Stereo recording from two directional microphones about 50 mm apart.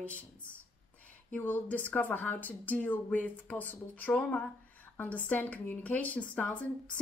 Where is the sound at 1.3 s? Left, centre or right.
Left.